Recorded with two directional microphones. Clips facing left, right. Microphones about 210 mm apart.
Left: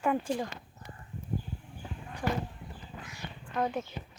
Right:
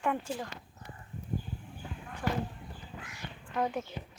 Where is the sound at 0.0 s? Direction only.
10° left (ahead or behind).